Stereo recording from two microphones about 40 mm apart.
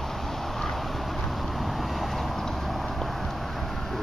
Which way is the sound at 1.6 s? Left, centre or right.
Centre.